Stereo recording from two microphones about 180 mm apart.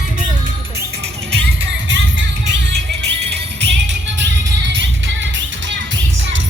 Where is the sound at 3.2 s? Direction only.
75° right (ahead or behind).